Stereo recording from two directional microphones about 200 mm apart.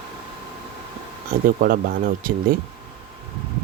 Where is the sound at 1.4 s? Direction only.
45° right (ahead or behind).